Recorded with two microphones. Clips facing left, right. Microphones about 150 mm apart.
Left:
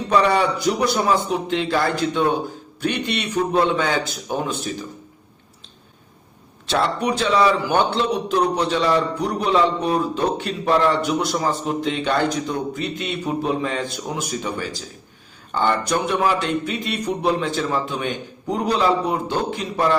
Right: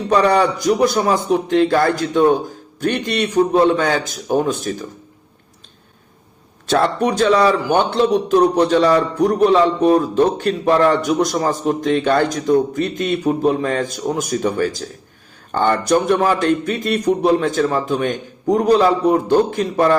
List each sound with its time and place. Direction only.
0.2 s a man's voice: 40° right (ahead or behind)
6.7 s a man's voice: 45° right (ahead or behind)